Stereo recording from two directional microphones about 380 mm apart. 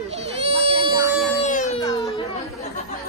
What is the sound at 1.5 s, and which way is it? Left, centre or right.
Music, centre.